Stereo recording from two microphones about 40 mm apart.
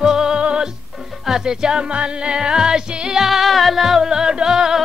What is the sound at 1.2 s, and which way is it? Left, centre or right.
Music, centre.